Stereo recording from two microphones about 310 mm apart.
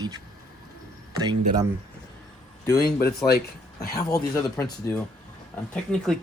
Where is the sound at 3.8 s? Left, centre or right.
Left.